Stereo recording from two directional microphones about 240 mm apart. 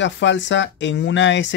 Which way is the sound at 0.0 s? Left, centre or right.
Left.